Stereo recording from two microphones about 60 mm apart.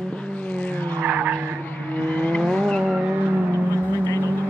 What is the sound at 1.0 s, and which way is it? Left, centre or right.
Skidding, right.